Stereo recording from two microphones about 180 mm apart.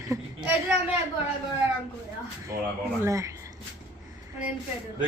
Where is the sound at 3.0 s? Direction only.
15° right (ahead or behind).